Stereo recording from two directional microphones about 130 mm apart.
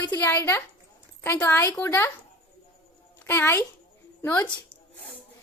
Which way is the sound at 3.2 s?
15° left (ahead or behind).